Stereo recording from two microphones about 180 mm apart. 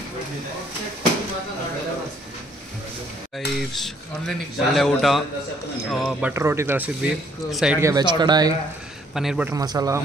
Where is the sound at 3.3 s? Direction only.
Centre (ahead or behind).